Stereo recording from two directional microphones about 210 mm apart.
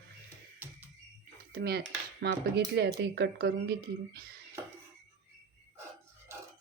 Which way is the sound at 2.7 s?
55° right (ahead or behind).